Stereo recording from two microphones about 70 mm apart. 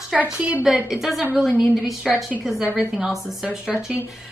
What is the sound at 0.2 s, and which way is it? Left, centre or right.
Speech, right.